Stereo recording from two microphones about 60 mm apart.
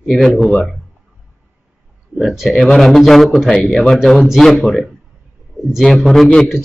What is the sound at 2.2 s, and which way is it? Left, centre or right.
A man's voice, centre.